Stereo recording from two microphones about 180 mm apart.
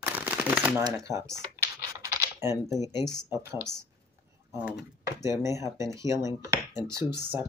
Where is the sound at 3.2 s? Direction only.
15° right (ahead or behind).